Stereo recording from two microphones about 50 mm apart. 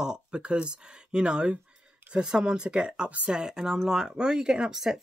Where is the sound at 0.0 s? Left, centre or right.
Centre.